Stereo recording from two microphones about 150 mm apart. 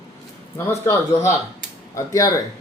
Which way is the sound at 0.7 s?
15° left (ahead or behind).